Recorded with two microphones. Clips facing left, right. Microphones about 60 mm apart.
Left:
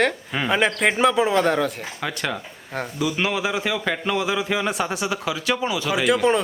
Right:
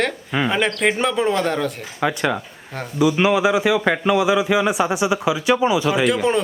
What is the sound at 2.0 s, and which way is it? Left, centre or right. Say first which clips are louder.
A man's voice: right 7 dB; centre.